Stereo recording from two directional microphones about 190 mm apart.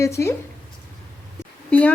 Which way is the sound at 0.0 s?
15° left (ahead or behind).